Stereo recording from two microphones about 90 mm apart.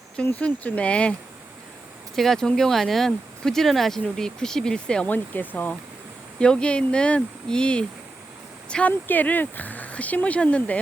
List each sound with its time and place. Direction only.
0.3 s speech: 15° left (ahead or behind)
2.1 s speech: 5° left (ahead or behind)
8.9 s speech: 20° left (ahead or behind)